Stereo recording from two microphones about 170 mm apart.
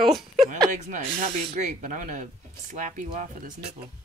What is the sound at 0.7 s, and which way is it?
Speech, 45° right (ahead or behind).